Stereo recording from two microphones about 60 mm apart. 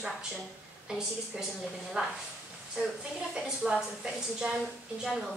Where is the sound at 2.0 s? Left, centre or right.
Centre.